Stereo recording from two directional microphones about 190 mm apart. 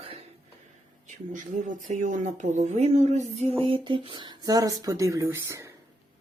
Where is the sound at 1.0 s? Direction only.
40° right (ahead or behind); by 5.7 s 15° right (ahead or behind).